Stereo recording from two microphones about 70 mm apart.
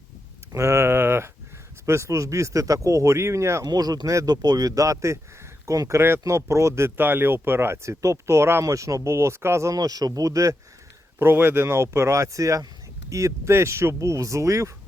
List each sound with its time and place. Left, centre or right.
0.5 s a sound: right
1.9 s speech: right
3.7 s speech: right
8.6 s speech: right
9.7 s speech: right
11.2 s speech: right